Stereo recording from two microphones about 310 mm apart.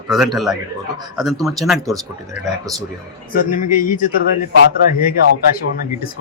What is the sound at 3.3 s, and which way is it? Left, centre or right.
Speech, left.